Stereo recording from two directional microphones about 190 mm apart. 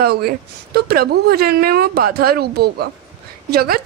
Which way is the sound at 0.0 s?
55° right (ahead or behind).